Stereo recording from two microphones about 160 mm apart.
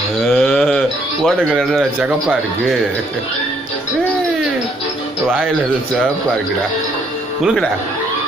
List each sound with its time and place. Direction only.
0.3 s a sound: centre (ahead or behind)
1.4 s a man's voice: 5° right (ahead or behind)
7.4 s speech: centre (ahead or behind)